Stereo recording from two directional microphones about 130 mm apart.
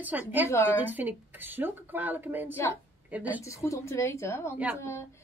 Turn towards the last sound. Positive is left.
turn(degrees=20)  # may be behind; listen again after turning